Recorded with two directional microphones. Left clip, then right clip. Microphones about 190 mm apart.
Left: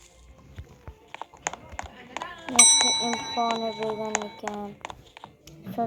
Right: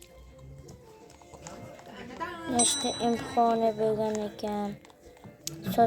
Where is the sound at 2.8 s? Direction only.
40° right (ahead or behind).